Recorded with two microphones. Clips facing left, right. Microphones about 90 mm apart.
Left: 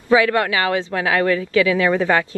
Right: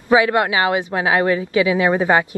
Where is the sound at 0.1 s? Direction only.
20° right (ahead or behind).